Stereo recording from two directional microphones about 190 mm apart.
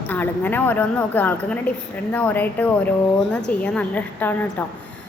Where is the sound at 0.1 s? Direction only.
10° left (ahead or behind).